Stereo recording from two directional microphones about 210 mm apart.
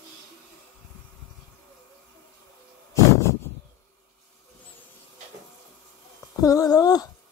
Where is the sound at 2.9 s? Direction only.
15° left (ahead or behind).